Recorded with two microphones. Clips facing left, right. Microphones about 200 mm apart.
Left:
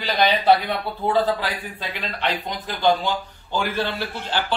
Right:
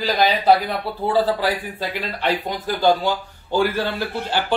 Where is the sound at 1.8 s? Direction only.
10° right (ahead or behind).